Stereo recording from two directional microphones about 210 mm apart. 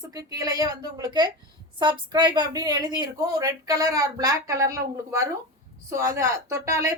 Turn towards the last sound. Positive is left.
turn(degrees=-15)  # may be behind; listen again after turning